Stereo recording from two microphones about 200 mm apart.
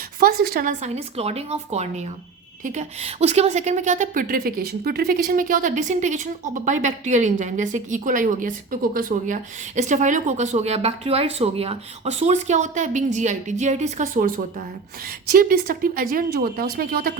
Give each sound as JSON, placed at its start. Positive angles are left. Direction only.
{"t": 0.2, "sound": "a woman's voice", "side_deg": -50}